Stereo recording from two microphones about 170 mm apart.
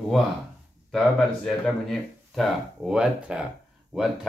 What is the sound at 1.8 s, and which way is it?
Speech, centre (ahead or behind).